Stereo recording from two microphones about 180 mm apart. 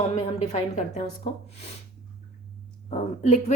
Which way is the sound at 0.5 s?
40° left (ahead or behind).